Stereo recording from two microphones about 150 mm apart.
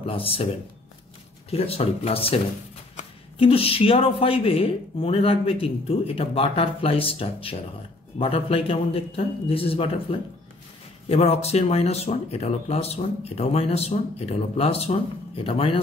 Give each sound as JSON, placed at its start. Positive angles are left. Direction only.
{"t": 0.0, "sound": "speech", "side_deg": 40}
{"t": 1.5, "sound": "speech", "side_deg": 40}